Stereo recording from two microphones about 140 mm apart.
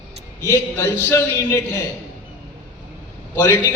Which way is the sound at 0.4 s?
15° left (ahead or behind).